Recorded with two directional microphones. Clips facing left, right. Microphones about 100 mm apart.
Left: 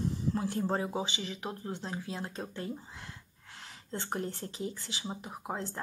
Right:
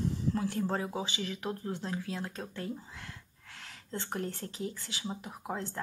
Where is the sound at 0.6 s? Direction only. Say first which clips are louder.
Left 1 dB; 20° left (ahead or behind).